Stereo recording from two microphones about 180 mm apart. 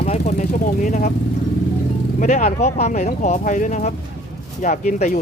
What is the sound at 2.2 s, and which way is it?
Speech, 40° left (ahead or behind).